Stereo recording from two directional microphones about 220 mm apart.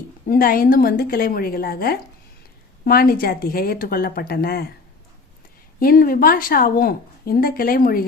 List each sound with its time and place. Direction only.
0.3 s speech: 40° left (ahead or behind)
5.8 s a woman's voice: 40° left (ahead or behind)